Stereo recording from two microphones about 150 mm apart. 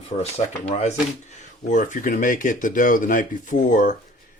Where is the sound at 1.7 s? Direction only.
60° left (ahead or behind).